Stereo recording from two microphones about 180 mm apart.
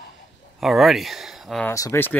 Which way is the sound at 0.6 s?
Centre (ahead or behind).